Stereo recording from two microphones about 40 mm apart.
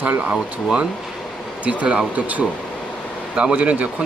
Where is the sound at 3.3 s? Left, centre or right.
Right.